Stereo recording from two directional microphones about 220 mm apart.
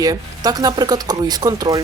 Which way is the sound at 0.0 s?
15° right (ahead or behind).